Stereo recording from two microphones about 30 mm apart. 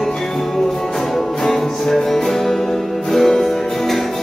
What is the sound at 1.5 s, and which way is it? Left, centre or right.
Music, centre.